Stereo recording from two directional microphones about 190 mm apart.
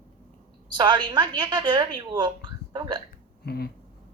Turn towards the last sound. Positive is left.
turn(degrees=55)  # may be behind; listen again after turning